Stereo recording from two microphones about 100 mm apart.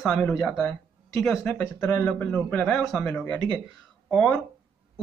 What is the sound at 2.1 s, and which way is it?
Speech, 15° left (ahead or behind).